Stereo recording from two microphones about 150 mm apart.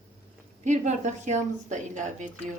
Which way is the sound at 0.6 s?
55° right (ahead or behind).